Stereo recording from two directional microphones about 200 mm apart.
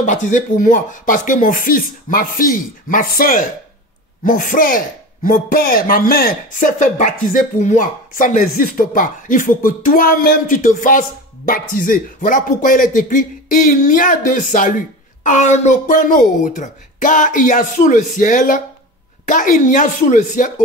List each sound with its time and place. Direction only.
0.0 s speech: 40° left (ahead or behind)